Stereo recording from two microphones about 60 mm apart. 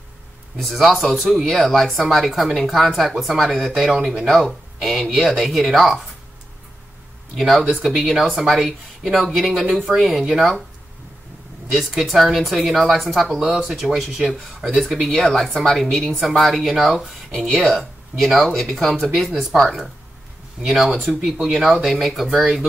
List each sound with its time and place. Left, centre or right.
0.6 s speech: centre
7.3 s speech: centre
11.7 s speech: centre